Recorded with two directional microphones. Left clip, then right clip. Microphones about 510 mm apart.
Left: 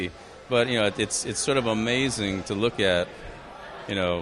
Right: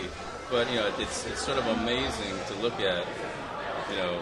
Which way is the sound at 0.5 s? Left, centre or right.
Left.